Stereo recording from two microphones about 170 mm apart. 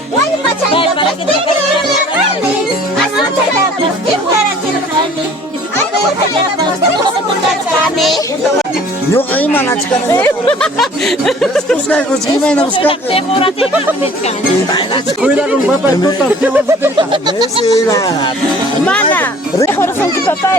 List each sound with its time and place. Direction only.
0.7 s music: 30° left (ahead or behind)
7.9 s a sound: centre (ahead or behind)
9.1 s speech: 10° left (ahead or behind)
10.6 s speech: centre (ahead or behind)
12.7 s speech: 30° left (ahead or behind)
16.4 s speech: 10° right (ahead or behind)
17.0 s speech: 25° right (ahead or behind)
17.7 s speech: 20° left (ahead or behind)